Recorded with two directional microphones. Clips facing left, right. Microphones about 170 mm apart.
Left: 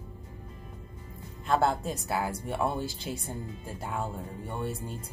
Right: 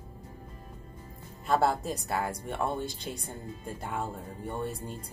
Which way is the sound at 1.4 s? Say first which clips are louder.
Even; centre (ahead or behind).